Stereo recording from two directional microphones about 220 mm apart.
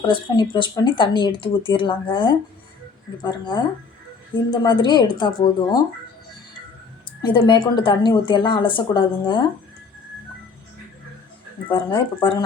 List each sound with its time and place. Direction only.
0.1 s speech: 20° left (ahead or behind)
7.2 s speech: 20° left (ahead or behind)
11.7 s speech: 20° left (ahead or behind)